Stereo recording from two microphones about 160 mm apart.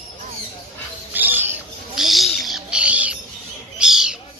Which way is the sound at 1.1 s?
10° right (ahead or behind).